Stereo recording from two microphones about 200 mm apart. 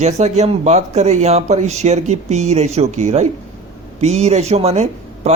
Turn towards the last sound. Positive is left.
turn(degrees=-30)  # may be behind; listen again after turning